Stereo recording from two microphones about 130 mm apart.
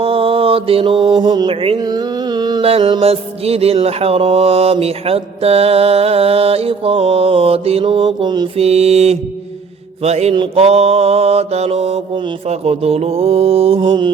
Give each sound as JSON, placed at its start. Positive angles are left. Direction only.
{"t": 0.0, "sound": "mantra", "side_deg": -45}
{"t": 1.8, "sound": "a sound", "side_deg": -30}
{"t": 2.6, "sound": "mantra", "side_deg": -50}
{"t": 8.5, "sound": "mantra", "side_deg": -55}
{"t": 10.3, "sound": "mantra", "side_deg": -40}
{"t": 10.6, "sound": "mantra", "side_deg": -50}